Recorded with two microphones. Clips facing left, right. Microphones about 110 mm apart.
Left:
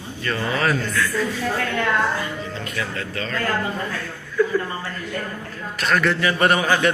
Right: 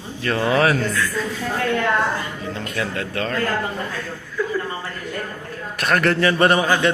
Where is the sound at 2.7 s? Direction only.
55° right (ahead or behind).